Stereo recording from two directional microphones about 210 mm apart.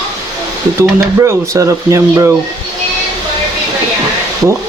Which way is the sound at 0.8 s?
15° right (ahead or behind).